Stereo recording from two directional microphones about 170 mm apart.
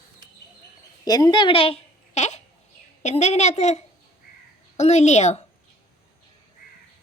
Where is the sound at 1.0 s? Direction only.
25° left (ahead or behind); by 5.5 s 40° left (ahead or behind).